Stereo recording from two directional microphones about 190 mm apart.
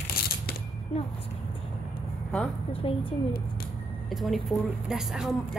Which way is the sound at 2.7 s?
30° left (ahead or behind).